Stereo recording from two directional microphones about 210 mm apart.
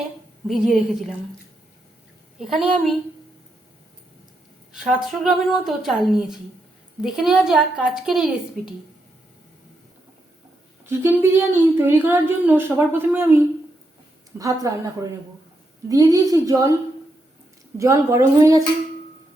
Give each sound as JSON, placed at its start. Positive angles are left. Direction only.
{"t": 0.4, "sound": "speech", "side_deg": 0}
{"t": 2.4, "sound": "speech", "side_deg": 0}
{"t": 4.7, "sound": "speech", "side_deg": -5}
{"t": 10.8, "sound": "a woman's voice", "side_deg": -10}
{"t": 14.3, "sound": "a woman's voice", "side_deg": -15}
{"t": 15.9, "sound": "a woman's voice", "side_deg": -15}
{"t": 17.7, "sound": "a woman's voice", "side_deg": -15}